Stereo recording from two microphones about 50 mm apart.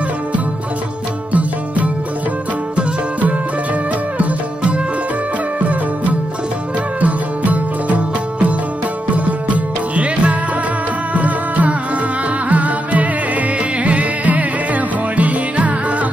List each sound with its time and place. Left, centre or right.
2.7 s music: right
5.6 s music: right
9.1 s music: right